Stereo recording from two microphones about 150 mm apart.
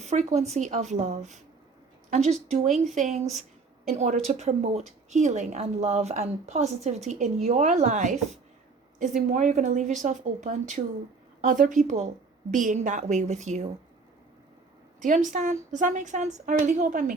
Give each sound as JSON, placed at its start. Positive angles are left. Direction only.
{"t": 0.0, "sound": "a woman's voice", "side_deg": -50}
{"t": 15.0, "sound": "a woman's voice", "side_deg": -60}